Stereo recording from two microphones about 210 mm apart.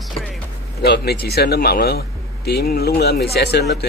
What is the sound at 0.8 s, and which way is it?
A man's voice, 50° left (ahead or behind).